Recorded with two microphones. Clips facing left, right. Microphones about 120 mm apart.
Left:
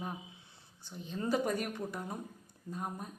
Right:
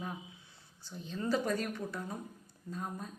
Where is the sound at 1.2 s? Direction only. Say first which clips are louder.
Even; 15° left (ahead or behind).